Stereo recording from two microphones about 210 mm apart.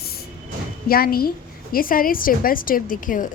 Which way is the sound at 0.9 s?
45° left (ahead or behind).